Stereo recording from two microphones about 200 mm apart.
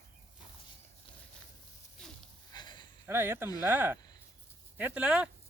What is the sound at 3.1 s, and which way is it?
Speech, 10° right (ahead or behind).